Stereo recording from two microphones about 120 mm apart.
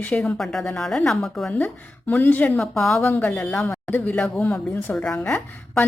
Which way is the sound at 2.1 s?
15° left (ahead or behind).